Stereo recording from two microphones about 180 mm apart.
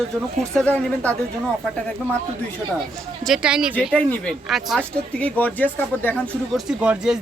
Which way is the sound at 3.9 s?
5° left (ahead or behind).